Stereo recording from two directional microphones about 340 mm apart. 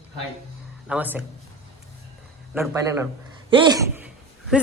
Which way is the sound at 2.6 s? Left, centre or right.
Centre.